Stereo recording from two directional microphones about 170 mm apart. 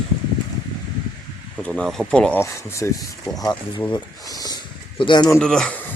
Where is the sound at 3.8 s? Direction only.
25° left (ahead or behind).